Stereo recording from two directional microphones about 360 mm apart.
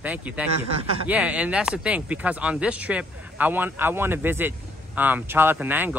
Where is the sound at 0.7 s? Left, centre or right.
Centre.